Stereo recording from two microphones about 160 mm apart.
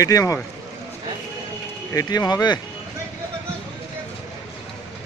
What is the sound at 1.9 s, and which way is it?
Speech, 20° left (ahead or behind).